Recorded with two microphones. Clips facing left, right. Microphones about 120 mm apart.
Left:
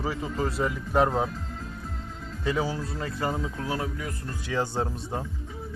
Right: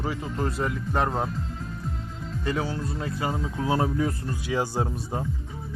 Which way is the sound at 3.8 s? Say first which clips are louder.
Right 8 dB; 30° right (ahead or behind).